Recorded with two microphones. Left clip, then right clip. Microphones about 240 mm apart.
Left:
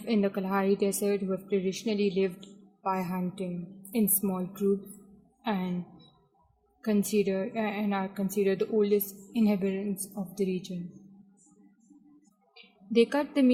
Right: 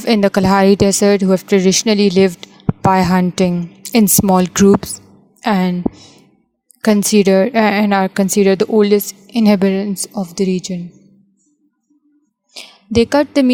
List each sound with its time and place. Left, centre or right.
0.0 s a woman's voice: right
6.8 s a woman's voice: right
12.9 s a woman's voice: right